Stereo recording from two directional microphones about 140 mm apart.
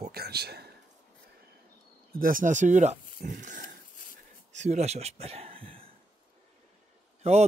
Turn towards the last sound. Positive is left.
turn(degrees=-50)  # may be behind; listen again after turning